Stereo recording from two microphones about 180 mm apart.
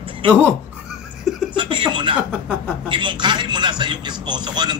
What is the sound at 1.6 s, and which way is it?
Chuckle, 25° right (ahead or behind).